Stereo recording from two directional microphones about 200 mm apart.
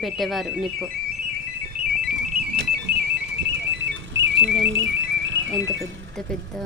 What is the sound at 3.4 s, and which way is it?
Alarm clock, 65° right (ahead or behind).